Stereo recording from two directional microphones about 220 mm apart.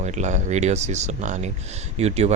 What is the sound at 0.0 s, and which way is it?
Speech, 30° right (ahead or behind).